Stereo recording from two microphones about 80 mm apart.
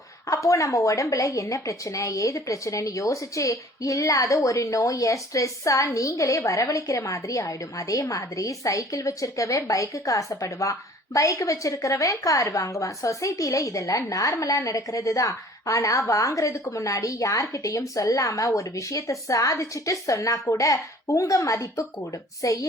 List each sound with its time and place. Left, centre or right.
0.4 s a woman's voice: left